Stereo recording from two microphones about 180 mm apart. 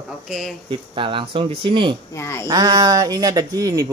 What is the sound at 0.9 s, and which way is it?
Speech, 30° right (ahead or behind).